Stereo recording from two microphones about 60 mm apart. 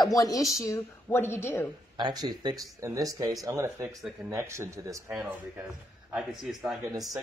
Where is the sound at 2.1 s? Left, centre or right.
Right.